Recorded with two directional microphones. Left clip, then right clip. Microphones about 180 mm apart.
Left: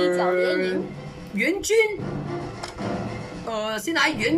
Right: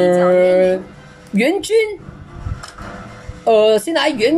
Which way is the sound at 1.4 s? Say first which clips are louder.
Right 5 dB; 25° right (ahead or behind).